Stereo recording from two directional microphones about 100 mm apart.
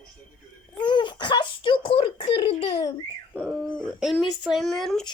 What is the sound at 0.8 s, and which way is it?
A child's voice, 50° left (ahead or behind).